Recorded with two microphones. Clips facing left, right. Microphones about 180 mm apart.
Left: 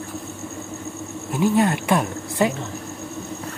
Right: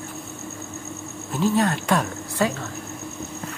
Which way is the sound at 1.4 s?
15° left (ahead or behind).